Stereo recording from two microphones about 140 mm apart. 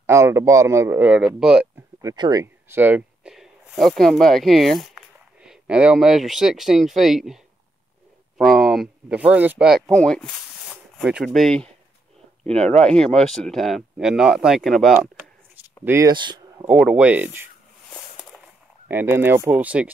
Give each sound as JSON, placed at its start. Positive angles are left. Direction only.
{"t": 0.0, "sound": "a man's voice", "side_deg": -20}
{"t": 2.0, "sound": "speech", "side_deg": -25}
{"t": 2.4, "sound": "speech", "side_deg": -15}
{"t": 3.3, "sound": "speech", "side_deg": 0}
{"t": 8.4, "sound": "speech", "side_deg": 0}
{"t": 9.8, "sound": "speech", "side_deg": 5}
{"t": 10.7, "sound": "a sound", "side_deg": -5}
{"t": 11.2, "sound": "speech", "side_deg": 5}
{"t": 12.5, "sound": "speech", "side_deg": -50}
{"t": 12.8, "sound": "speech", "side_deg": 5}
{"t": 15.8, "sound": "a man's voice", "side_deg": -15}
{"t": 16.1, "sound": "speech", "side_deg": -35}
{"t": 16.6, "sound": "a man's voice", "side_deg": -10}
{"t": 18.9, "sound": "a man's voice", "side_deg": -15}